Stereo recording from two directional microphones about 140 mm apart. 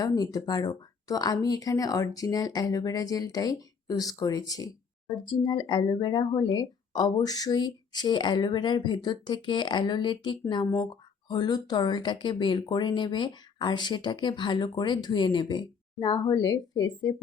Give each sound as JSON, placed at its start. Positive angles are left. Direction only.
{"t": 0.0, "sound": "a woman's voice", "side_deg": 25}